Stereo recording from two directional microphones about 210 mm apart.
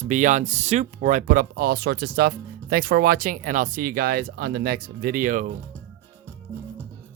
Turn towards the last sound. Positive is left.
turn(degrees=-40)  # may be behind; listen again after turning